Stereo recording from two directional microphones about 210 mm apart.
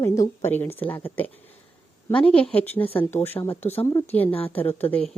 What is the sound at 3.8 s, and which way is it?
Speech, 20° left (ahead or behind).